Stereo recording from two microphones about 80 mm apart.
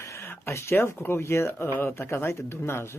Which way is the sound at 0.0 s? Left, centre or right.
Left.